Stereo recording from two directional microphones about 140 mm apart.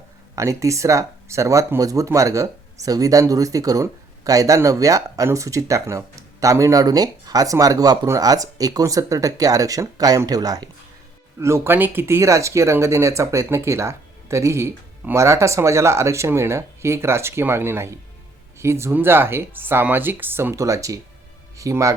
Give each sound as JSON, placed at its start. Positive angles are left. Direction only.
{"t": 0.3, "sound": "speech", "side_deg": -20}